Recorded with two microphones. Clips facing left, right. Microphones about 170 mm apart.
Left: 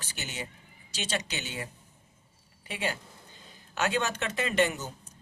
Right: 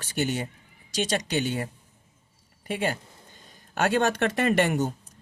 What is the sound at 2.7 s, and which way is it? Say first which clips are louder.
Speech: right 6 dB; 50° right (ahead or behind).